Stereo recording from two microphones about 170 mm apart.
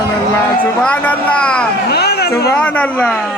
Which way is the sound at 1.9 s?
70° left (ahead or behind).